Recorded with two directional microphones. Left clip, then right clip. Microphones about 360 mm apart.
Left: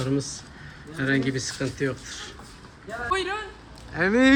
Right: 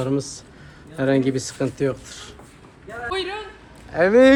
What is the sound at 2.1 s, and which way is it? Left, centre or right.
Speech, right.